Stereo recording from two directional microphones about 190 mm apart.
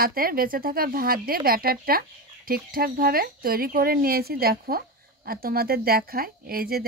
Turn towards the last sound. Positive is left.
turn(degrees=-50)  # may be behind; listen again after turning